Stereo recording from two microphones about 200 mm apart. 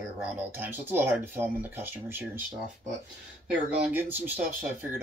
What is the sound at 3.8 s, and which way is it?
Speech, 10° right (ahead or behind).